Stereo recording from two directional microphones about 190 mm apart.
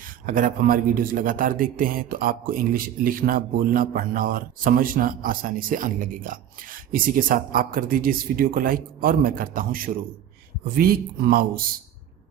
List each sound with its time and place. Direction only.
0.0 s a man's voice: 45° right (ahead or behind)